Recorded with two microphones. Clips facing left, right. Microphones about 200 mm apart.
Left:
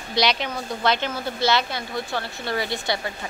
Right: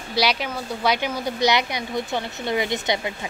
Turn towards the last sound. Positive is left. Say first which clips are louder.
# right 3 dB
turn(degrees=-20)  # may be behind; listen again after turning